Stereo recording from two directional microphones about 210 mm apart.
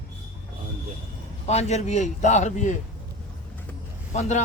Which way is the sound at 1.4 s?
30° left (ahead or behind).